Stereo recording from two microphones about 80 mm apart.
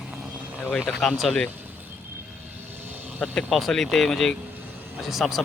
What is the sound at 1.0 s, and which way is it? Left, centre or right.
Speech, centre.